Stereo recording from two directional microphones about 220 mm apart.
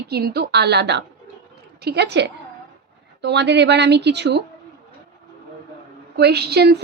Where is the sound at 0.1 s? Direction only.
45° right (ahead or behind).